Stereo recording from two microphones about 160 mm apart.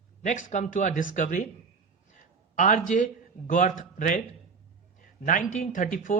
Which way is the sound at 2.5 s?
55° left (ahead or behind).